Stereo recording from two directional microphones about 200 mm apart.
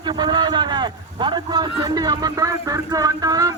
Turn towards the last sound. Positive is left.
turn(degrees=-15)  # may be behind; listen again after turning